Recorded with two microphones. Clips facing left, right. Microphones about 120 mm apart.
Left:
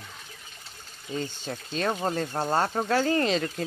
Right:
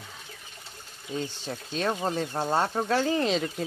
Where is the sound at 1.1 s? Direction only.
Centre (ahead or behind).